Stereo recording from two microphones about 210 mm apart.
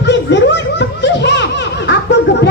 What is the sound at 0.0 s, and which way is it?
Music, 55° left (ahead or behind).